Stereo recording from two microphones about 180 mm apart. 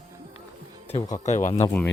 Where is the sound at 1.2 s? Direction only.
40° left (ahead or behind).